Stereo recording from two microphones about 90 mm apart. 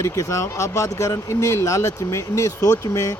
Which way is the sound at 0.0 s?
35° left (ahead or behind).